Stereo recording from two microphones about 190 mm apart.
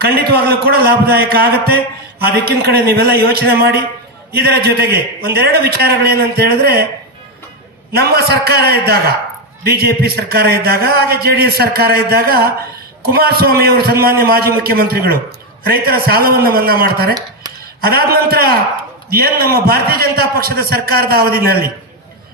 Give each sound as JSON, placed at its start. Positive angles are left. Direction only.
{"t": 0.0, "sound": "a man's voice", "side_deg": -55}
{"t": 7.9, "sound": "a man's voice", "side_deg": -55}